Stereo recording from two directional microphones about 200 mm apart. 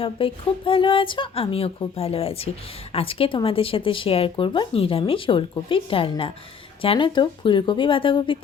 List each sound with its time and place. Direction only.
0.0 s speech: 25° left (ahead or behind)